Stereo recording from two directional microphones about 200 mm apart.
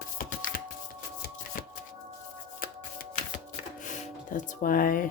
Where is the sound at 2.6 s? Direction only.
45° left (ahead or behind).